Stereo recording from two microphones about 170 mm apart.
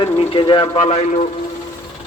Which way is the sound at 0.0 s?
30° left (ahead or behind).